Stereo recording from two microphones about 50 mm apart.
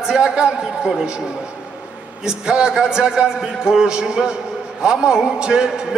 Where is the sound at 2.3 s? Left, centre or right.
Centre.